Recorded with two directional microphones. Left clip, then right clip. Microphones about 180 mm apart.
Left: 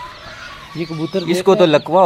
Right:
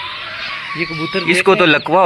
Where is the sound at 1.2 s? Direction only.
10° left (ahead or behind).